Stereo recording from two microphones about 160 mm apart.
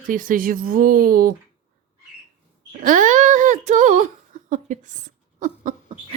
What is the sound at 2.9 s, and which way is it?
Speech, 55° right (ahead or behind).